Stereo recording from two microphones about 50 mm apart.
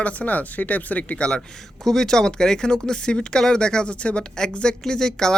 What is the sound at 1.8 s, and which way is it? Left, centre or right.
Speech, centre.